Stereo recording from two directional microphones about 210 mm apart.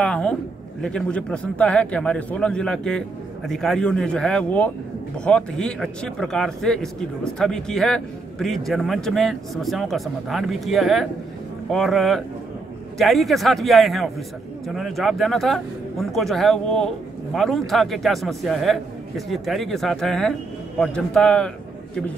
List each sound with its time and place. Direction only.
0.0 s a man's voice: 5° left (ahead or behind)